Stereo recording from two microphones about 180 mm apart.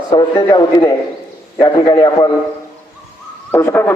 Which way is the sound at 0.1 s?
25° left (ahead or behind).